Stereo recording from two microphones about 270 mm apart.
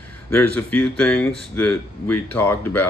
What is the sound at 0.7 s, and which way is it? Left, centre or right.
Speech, centre.